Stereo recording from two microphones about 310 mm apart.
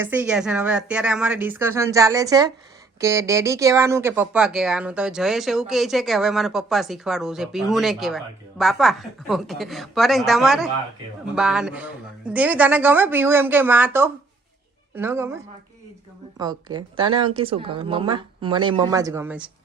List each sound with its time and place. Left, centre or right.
0.0 s speech: centre
16.4 s speech: centre